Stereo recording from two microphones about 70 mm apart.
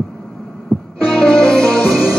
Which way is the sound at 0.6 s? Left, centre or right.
Centre.